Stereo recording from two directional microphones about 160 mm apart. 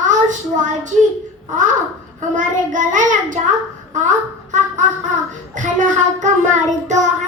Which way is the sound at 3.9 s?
50° right (ahead or behind).